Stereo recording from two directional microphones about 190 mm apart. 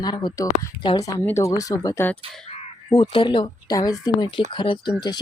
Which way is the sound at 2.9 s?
25° left (ahead or behind).